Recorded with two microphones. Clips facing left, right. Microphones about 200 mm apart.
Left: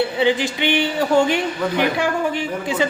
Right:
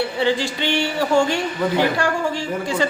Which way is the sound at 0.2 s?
15° left (ahead or behind).